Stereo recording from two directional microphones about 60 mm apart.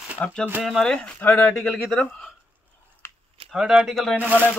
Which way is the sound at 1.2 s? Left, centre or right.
Left.